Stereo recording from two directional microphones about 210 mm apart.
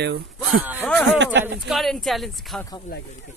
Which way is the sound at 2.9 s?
45° left (ahead or behind).